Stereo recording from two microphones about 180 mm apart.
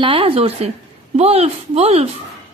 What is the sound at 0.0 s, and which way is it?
A woman's voice, 30° right (ahead or behind).